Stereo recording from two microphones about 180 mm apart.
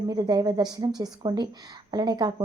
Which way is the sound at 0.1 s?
20° right (ahead or behind).